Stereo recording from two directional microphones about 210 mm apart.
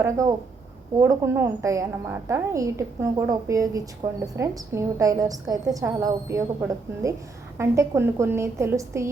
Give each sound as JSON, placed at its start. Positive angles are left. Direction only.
{"t": 0.0, "sound": "a woman's voice", "side_deg": -15}